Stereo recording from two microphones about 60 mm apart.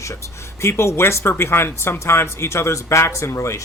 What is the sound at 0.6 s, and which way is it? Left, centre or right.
Speech, left.